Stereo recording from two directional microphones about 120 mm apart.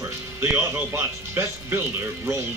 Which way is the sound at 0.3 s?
20° right (ahead or behind).